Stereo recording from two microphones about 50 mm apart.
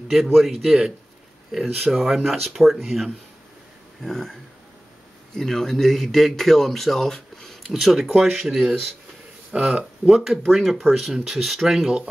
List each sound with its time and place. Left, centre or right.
0.1 s speech: centre
9.5 s speech: right
10.0 s speech: centre